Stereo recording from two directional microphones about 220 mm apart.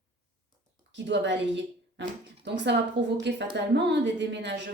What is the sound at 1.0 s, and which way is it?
A woman's voice, 50° right (ahead or behind).